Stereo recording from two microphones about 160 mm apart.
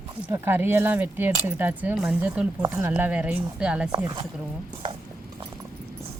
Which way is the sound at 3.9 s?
30° right (ahead or behind).